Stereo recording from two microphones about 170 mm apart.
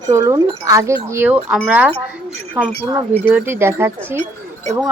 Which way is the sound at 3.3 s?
10° right (ahead or behind).